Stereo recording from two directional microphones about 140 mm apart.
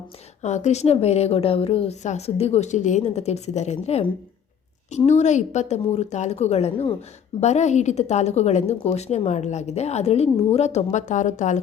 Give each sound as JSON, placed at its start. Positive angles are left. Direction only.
{"t": 0.4, "sound": "a woman's voice", "side_deg": 55}
{"t": 7.4, "sound": "a woman's voice", "side_deg": 55}